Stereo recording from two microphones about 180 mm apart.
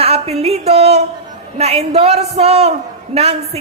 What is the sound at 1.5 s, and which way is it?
A man's voice, 35° right (ahead or behind).